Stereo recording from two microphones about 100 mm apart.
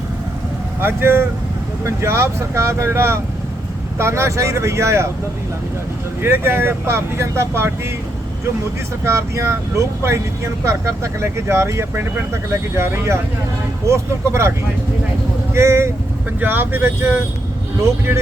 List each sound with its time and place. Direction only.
0.8 s speech: 20° right (ahead or behind)
6.2 s speech: 25° right (ahead or behind)
9.0 s speech: 25° right (ahead or behind)
15.5 s speech: 25° right (ahead or behind)